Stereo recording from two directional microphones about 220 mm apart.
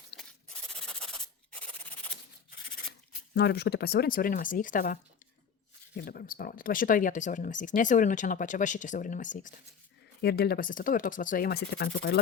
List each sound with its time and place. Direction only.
0.2 s rub: 5° left (ahead or behind)
3.3 s speech: 50° left (ahead or behind)
6.0 s speech: 40° left (ahead or behind)
10.2 s speech: 45° left (ahead or behind)